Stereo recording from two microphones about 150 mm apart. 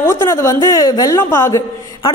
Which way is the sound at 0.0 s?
15° left (ahead or behind).